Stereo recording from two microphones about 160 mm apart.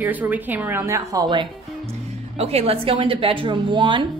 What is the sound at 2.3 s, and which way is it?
A woman's voice, 40° right (ahead or behind).